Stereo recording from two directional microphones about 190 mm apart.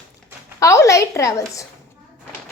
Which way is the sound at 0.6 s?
15° left (ahead or behind).